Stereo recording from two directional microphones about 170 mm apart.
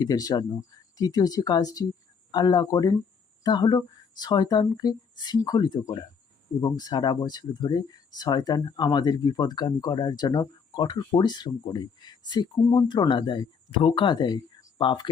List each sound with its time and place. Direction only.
0.0 s speech: 20° left (ahead or behind)